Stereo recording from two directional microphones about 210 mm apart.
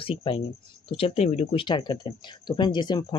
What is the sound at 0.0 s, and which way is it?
Speech, 25° left (ahead or behind).